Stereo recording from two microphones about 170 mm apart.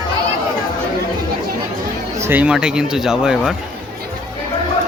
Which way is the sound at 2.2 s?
10° right (ahead or behind).